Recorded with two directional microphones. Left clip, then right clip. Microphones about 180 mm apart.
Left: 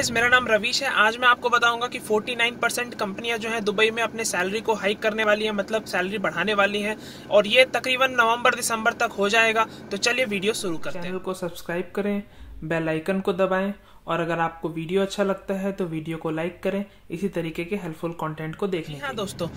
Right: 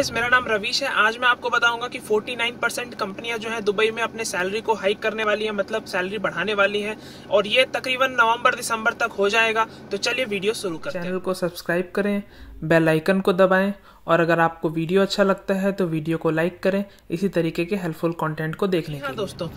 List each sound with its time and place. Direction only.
0.0 s speech: 10° left (ahead or behind)
11.2 s speech: 25° right (ahead or behind)
12.6 s speech: 35° right (ahead or behind)
19.0 s speech: 15° left (ahead or behind)